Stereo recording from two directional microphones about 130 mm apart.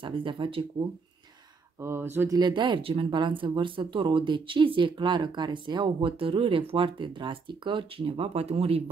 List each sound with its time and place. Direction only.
0.0 s speech: 40° right (ahead or behind)
1.8 s speech: 20° right (ahead or behind)
2.3 s speech: 35° right (ahead or behind)